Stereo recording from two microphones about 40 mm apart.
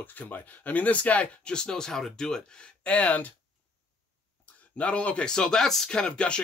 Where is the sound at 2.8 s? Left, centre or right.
Left.